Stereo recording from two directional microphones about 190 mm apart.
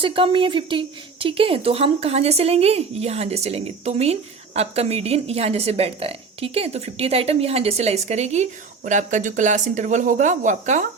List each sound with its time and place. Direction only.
0.0 s a woman's voice: 30° right (ahead or behind)